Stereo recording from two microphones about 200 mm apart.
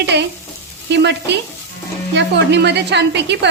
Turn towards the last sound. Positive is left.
turn(degrees=-60)  # may be behind; listen again after turning